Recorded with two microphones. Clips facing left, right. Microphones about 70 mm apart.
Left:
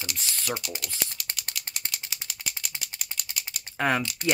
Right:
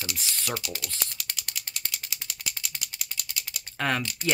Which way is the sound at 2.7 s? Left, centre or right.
Left.